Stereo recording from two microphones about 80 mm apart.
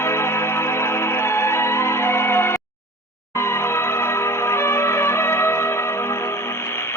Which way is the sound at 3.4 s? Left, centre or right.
Left.